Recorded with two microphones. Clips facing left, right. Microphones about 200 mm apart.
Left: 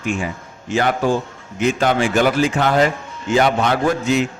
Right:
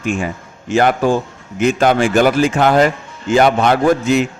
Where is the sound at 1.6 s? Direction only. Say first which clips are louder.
Right 4 dB; 50° right (ahead or behind).